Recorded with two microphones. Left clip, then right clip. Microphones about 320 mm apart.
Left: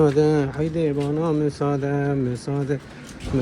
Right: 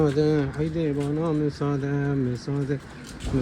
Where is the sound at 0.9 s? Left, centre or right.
Left.